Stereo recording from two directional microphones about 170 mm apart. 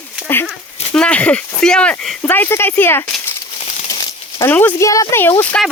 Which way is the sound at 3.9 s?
25° left (ahead or behind).